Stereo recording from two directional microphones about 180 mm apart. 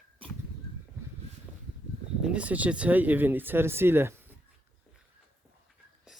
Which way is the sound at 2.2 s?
5° right (ahead or behind).